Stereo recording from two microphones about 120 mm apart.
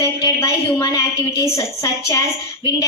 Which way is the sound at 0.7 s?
25° left (ahead or behind).